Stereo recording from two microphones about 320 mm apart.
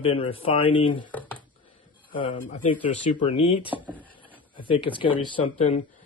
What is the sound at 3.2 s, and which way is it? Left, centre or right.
Speech, centre.